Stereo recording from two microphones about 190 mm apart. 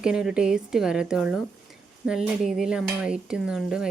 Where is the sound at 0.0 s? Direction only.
5° right (ahead or behind).